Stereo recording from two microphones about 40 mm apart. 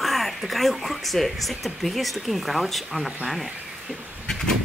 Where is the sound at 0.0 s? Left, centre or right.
Centre.